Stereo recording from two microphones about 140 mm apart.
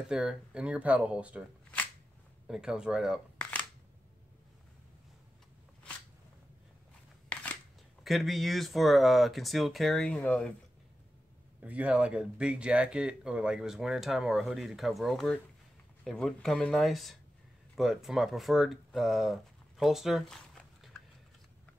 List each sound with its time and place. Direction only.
0.0 s speech: 5° right (ahead or behind)
2.4 s speech: 5° right (ahead or behind)
8.0 s speech: centre (ahead or behind)
11.6 s speech: 10° right (ahead or behind)